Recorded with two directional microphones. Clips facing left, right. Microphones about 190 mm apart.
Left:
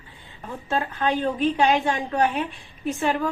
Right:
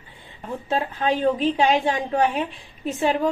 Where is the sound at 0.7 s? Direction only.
25° right (ahead or behind).